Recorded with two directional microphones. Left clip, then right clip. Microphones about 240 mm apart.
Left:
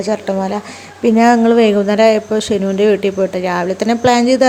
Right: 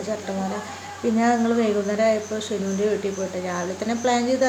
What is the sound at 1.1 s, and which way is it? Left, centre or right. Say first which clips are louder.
Speech: left 11 dB; left.